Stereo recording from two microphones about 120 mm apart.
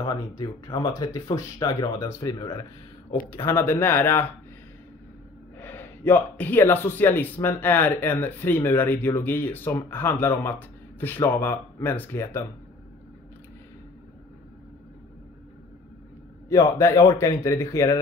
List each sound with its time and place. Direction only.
0.0 s speech: 40° left (ahead or behind)
2.0 s a man's voice: 25° left (ahead or behind)
2.3 s speech: 35° left (ahead or behind)
3.4 s a man's voice: 20° left (ahead or behind)
5.6 s a man's voice: 20° left (ahead or behind)
16.4 s a man's voice: 25° left (ahead or behind)